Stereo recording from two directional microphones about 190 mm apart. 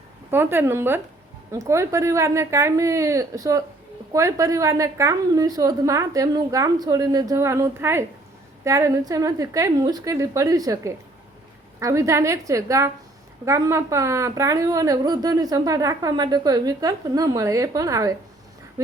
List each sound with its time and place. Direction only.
0.3 s a woman's voice: 10° right (ahead or behind)